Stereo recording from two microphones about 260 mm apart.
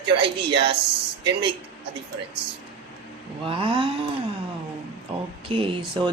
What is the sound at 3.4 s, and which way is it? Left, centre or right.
Speech, centre.